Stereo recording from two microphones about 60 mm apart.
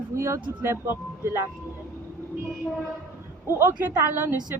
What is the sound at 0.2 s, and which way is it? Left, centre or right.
Speech, right.